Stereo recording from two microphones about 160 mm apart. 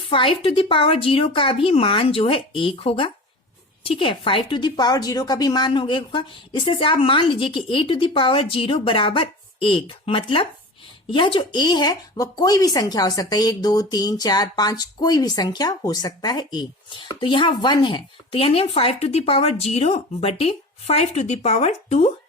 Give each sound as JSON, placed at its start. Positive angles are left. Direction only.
{"t": 0.1, "sound": "a woman's voice", "side_deg": 35}